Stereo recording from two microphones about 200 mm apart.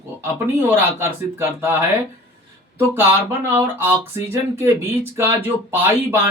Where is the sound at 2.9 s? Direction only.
10° right (ahead or behind).